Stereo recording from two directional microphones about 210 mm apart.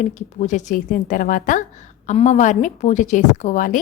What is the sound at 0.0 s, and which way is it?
A woman's voice, 35° left (ahead or behind).